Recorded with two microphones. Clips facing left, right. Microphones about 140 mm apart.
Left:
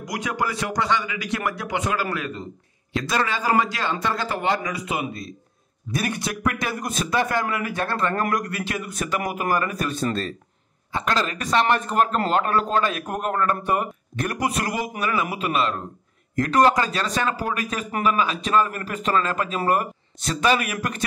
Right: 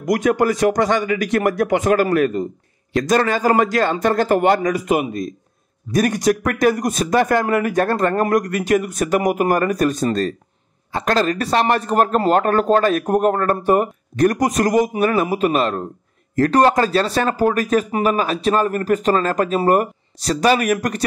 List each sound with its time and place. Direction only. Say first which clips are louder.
0.0 s a man's voice: right 10 dB; 50° right (ahead or behind)